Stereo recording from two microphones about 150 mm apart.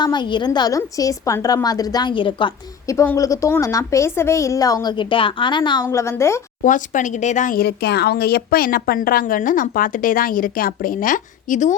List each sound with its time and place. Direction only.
0.0 s a woman's voice: 30° left (ahead or behind)
2.8 s a woman's voice: 20° left (ahead or behind)
5.8 s a woman's voice: 20° left (ahead or behind)
6.6 s speech: 60° left (ahead or behind)